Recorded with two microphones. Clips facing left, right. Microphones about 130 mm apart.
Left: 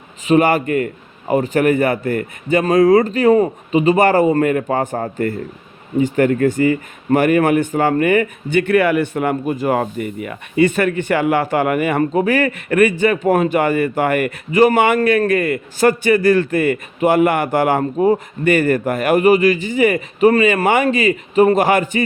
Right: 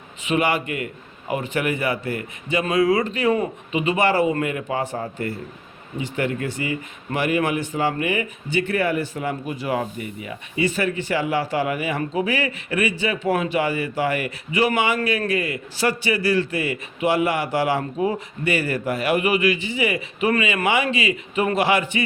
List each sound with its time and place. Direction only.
0.3 s speech: 45° left (ahead or behind)